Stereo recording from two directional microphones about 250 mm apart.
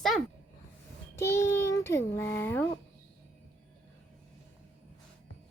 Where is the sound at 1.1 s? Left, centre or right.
Centre.